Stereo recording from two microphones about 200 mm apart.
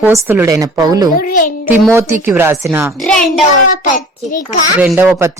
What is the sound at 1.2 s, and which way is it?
Speech, 45° left (ahead or behind).